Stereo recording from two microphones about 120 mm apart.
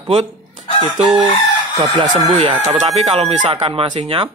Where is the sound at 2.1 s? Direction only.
90° right.